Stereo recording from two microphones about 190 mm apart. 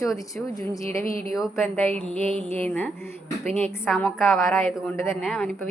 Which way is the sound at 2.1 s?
35° right (ahead or behind).